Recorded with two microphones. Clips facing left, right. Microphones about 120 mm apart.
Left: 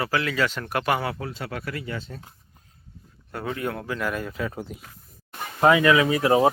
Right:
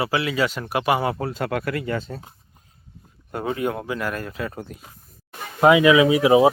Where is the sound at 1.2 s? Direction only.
45° right (ahead or behind); by 1.9 s 65° right (ahead or behind).